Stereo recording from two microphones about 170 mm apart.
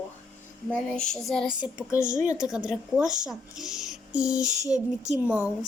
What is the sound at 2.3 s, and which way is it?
A woman's voice, 5° right (ahead or behind).